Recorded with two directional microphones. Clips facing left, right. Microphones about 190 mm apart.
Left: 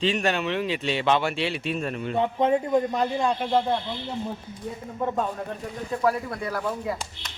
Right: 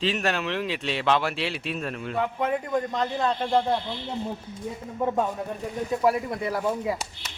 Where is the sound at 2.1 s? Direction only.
25° left (ahead or behind); by 3.8 s 5° left (ahead or behind).